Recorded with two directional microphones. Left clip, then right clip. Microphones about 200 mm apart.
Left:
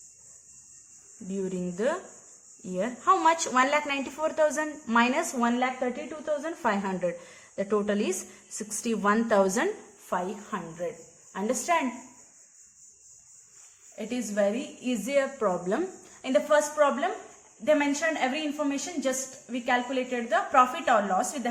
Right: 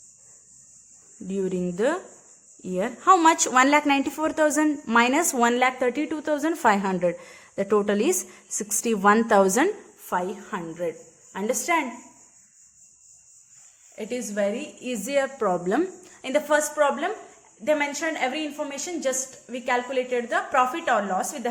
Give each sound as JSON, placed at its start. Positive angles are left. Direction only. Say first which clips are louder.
{"t": 1.3, "sound": "a woman's voice", "louder": "right 6 dB", "side_deg": -30}
{"t": 13.9, "sound": "a woman's voice", "louder": "right 1 dB", "side_deg": -25}